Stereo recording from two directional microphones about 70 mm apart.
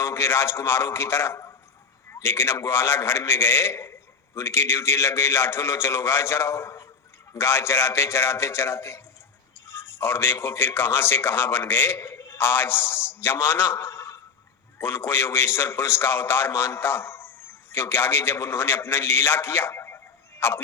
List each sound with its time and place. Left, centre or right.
0.0 s a man's voice: left
12.4 s a man's voice: left